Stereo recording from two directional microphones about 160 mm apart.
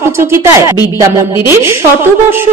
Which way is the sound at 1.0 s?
15° right (ahead or behind).